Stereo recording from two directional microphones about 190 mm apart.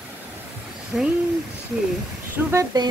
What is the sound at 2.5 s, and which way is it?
Speech, 20° right (ahead or behind).